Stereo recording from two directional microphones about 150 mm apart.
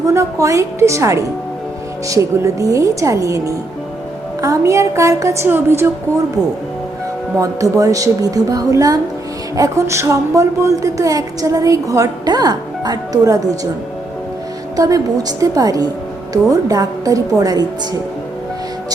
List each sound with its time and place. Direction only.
0.1 s a woman's voice: 20° right (ahead or behind)
7.3 s a woman's voice: 20° right (ahead or behind)
14.8 s a woman's voice: 25° right (ahead or behind)